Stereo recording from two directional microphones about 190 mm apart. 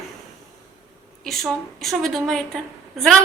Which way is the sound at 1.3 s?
Centre (ahead or behind).